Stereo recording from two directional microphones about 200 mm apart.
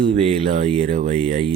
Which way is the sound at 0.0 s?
40° right (ahead or behind).